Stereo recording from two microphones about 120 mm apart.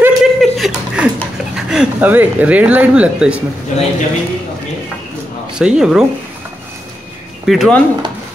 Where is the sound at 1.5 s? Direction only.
5° right (ahead or behind).